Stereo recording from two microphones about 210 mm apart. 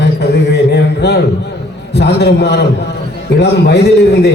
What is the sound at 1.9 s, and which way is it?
A man's voice, 55° left (ahead or behind).